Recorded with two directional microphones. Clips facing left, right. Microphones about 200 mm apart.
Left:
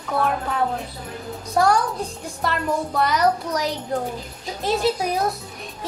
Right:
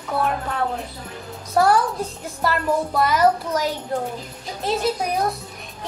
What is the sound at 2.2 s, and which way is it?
A child's voice, centre (ahead or behind).